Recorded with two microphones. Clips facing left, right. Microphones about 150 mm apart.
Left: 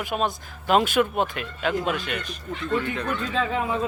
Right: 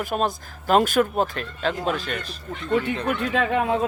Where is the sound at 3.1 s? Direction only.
70° right (ahead or behind).